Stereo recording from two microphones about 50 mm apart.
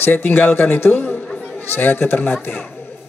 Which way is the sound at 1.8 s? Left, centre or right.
Left.